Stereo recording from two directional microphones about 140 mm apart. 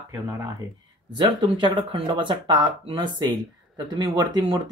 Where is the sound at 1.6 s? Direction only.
35° right (ahead or behind).